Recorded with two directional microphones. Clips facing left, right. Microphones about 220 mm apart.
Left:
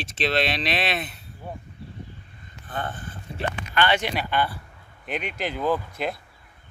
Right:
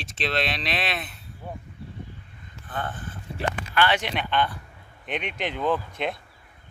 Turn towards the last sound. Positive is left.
turn(degrees=5)  # may be behind; listen again after turning